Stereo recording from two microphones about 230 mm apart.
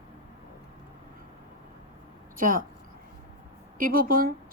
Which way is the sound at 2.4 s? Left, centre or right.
Right.